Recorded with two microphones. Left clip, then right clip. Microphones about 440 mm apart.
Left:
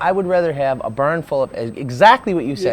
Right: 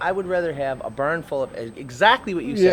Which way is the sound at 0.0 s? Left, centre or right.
Left.